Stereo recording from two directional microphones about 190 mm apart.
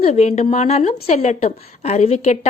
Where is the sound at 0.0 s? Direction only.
35° left (ahead or behind).